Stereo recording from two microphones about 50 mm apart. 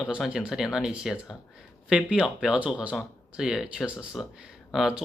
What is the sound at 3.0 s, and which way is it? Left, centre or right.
Speech, centre.